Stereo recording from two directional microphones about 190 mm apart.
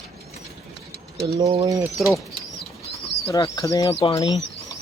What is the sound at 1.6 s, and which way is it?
Bird, 15° right (ahead or behind).